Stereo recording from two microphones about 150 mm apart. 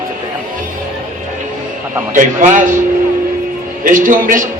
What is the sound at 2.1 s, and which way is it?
Speech, 60° right (ahead or behind).